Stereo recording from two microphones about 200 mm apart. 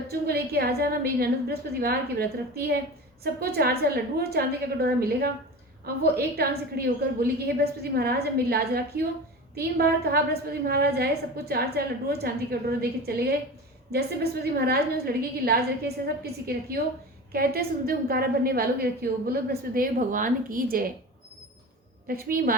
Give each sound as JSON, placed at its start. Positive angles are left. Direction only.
{"t": 0.1, "sound": "a woman's voice", "side_deg": -50}
{"t": 22.0, "sound": "a woman's voice", "side_deg": -50}